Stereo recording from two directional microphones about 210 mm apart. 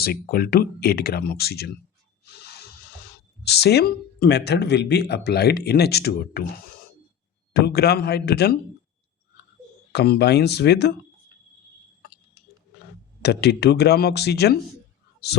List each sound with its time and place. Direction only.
0.0 s speech: 45° left (ahead or behind)
2.2 s music: 50° left (ahead or behind)
3.4 s speech: 50° left (ahead or behind)
7.5 s speech: 50° left (ahead or behind)
9.9 s speech: 50° left (ahead or behind)
13.2 s speech: 50° left (ahead or behind)